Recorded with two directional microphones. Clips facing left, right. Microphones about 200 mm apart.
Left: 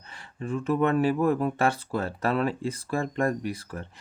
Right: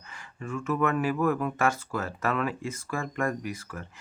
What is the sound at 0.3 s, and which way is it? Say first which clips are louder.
Speech: left 3 dB; 35° left (ahead or behind).